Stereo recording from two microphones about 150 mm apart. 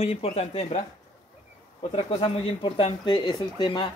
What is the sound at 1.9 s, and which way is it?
Speech, 40° left (ahead or behind).